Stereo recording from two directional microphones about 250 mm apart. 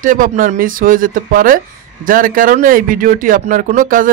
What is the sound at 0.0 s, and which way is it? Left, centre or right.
Speech, right.